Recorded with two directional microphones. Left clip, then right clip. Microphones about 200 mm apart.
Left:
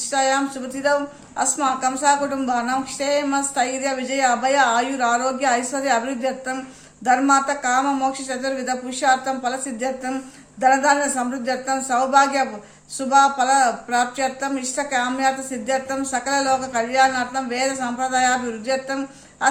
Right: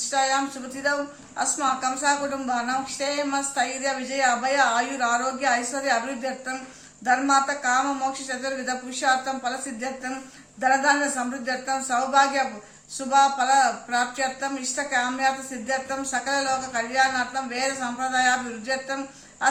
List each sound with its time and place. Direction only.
0.1 s speech: 45° left (ahead or behind)